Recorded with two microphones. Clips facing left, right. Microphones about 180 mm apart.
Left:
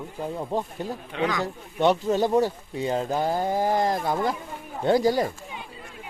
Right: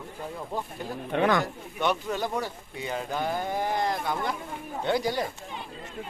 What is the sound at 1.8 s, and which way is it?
Speech, 35° left (ahead or behind).